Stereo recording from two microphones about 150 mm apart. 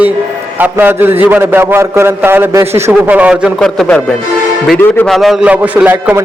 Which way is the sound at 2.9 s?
10° right (ahead or behind).